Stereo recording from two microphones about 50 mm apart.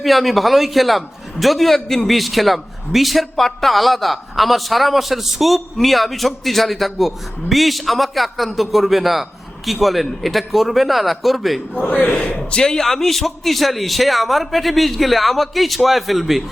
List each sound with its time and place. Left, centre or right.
0.0 s a man's voice: centre
11.9 s a man's voice: left
12.5 s a man's voice: centre